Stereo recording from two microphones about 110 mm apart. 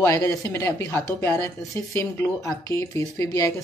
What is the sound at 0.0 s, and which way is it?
Speech, 30° left (ahead or behind).